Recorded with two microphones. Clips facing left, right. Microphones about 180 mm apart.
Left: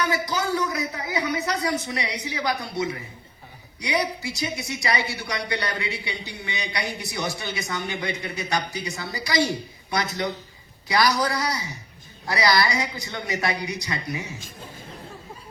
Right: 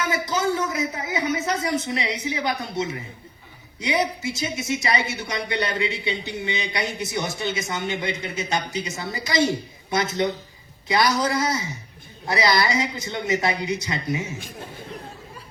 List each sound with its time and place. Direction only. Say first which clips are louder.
0.0 s a man's voice: right 1 dB; 20° right (ahead or behind)